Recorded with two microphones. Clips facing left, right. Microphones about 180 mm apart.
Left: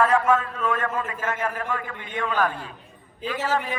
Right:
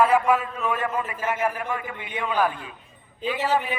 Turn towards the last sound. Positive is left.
turn(degrees=-15)  # may be behind; listen again after turning